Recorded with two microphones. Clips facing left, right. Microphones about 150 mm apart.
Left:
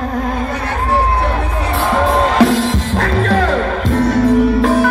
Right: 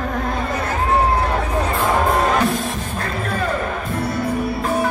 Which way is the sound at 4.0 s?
90° left.